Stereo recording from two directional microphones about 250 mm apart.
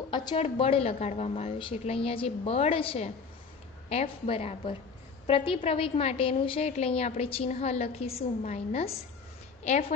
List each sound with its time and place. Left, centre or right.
0.1 s a woman's voice: centre